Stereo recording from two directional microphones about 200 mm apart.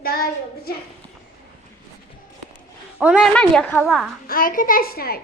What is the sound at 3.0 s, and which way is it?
A woman's voice, 5° right (ahead or behind).